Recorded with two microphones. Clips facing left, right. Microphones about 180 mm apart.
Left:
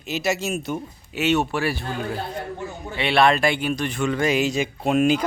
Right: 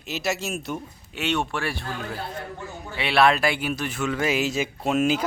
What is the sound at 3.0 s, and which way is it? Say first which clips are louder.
Speech: left 2 dB; 5° right (ahead or behind).